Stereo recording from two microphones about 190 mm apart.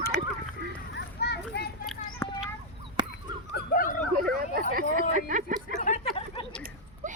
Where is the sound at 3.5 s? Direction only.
50° left (ahead or behind).